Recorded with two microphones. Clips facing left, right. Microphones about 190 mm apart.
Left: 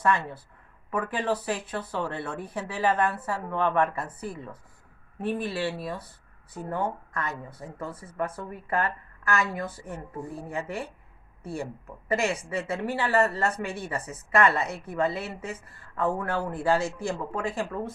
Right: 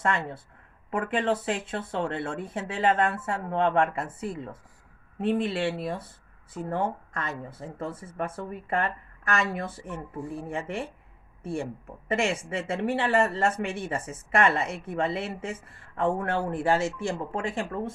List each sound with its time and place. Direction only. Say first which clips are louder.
0.0 s speech: left 2 dB; 25° right (ahead or behind)
12.0 s speech: even; 25° right (ahead or behind)